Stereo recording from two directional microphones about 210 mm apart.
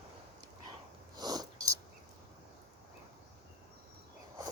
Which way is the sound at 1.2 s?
20° right (ahead or behind).